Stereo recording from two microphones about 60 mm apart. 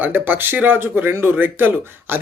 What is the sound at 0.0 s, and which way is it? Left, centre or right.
Speech, right.